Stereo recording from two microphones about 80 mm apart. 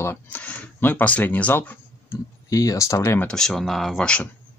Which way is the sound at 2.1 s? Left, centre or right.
Left.